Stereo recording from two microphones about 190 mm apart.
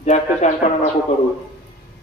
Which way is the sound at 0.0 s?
35° left (ahead or behind).